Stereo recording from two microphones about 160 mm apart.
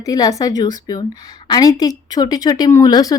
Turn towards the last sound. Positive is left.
turn(degrees=25)  # may be behind; listen again after turning